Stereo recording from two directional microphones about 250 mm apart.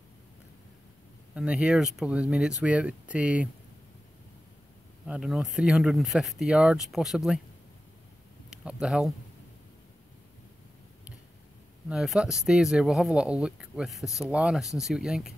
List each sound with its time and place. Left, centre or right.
1.3 s speech: centre
5.0 s speech: centre
8.5 s speech: centre
11.9 s speech: centre